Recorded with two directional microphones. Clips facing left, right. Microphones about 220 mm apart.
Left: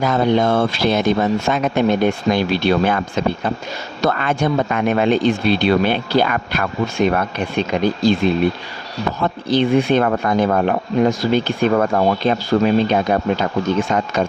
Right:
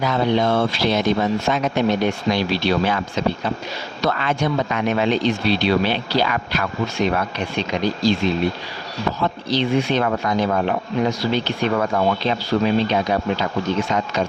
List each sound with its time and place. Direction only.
0.0 s speech: 50° left (ahead or behind)